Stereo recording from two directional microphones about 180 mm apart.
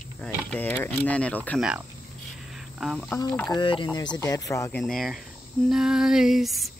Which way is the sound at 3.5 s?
25° left (ahead or behind).